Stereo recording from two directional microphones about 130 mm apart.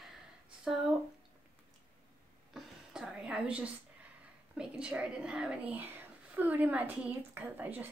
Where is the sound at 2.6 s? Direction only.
5° right (ahead or behind).